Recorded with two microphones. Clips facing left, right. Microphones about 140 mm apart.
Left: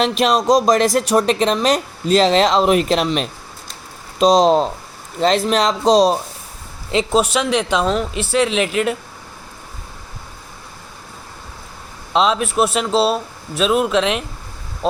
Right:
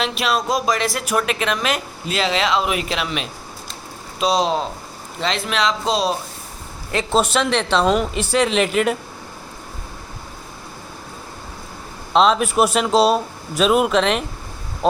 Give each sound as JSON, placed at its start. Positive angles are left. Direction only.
{"t": 0.0, "sound": "speech", "side_deg": 40}
{"t": 7.1, "sound": "speech", "side_deg": 5}
{"t": 7.9, "sound": "speech", "side_deg": -5}
{"t": 12.1, "sound": "speech", "side_deg": 0}